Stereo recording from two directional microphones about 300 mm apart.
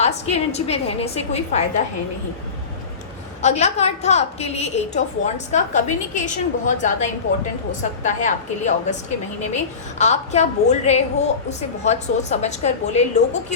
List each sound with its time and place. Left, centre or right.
0.0 s a woman's voice: left
3.4 s a woman's voice: left
10.0 s a woman's voice: left